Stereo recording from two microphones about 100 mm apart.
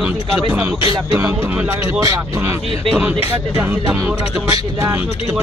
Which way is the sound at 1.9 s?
35° right (ahead or behind).